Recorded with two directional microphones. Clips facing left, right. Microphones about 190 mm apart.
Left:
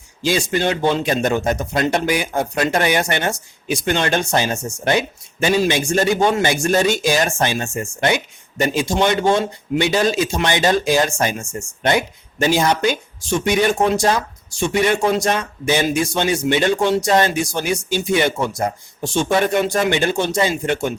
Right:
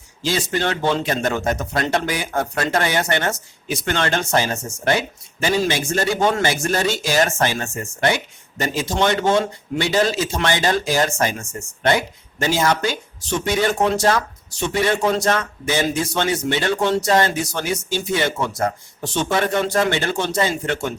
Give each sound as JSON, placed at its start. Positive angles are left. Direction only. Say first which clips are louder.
{"t": 0.2, "sound": "speech", "louder": "left 3 dB", "side_deg": 15}